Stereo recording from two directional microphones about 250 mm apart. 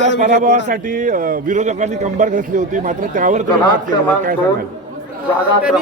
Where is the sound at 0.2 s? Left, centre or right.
Right.